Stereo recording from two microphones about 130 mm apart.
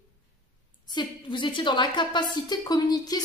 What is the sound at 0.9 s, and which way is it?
A woman's voice, 35° left (ahead or behind).